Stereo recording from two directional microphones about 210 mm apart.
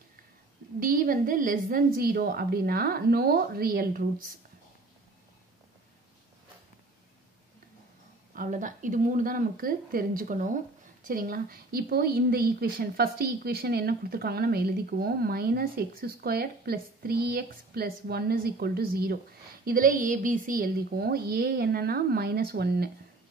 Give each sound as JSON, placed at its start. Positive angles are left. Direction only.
{"t": 0.7, "sound": "speech", "side_deg": -40}
{"t": 8.4, "sound": "a woman's voice", "side_deg": -40}